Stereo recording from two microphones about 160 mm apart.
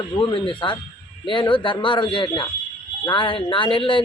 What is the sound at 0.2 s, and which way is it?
A man's voice, 30° left (ahead or behind).